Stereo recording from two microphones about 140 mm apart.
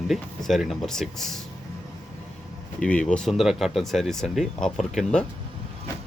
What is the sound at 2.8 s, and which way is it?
Speech, 10° left (ahead or behind).